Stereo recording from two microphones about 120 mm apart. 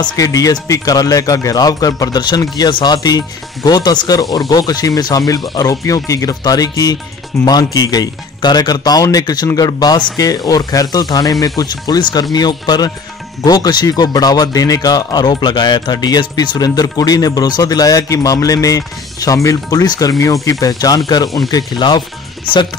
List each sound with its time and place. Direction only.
0.0 s speech: 30° left (ahead or behind)